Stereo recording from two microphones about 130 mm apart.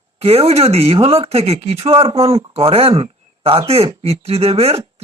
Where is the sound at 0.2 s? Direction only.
50° right (ahead or behind).